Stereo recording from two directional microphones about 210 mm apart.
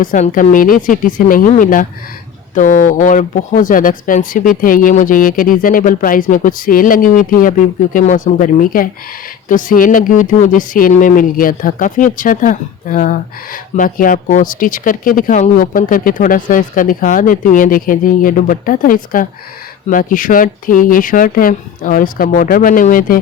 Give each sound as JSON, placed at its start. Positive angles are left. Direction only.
{"t": 0.0, "sound": "speech", "side_deg": 40}